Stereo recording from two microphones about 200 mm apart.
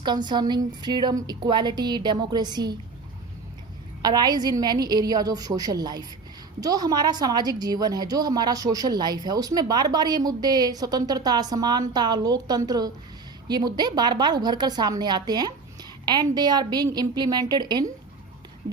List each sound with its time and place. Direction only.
0.0 s a woman's voice: 20° right (ahead or behind)
4.0 s a woman's voice: 20° right (ahead or behind)
18.6 s speech: 55° right (ahead or behind)